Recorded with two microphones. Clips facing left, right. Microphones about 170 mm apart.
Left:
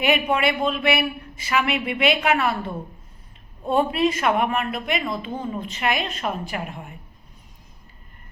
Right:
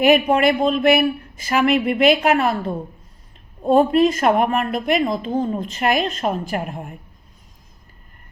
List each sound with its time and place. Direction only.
0.0 s a man's voice: 40° right (ahead or behind)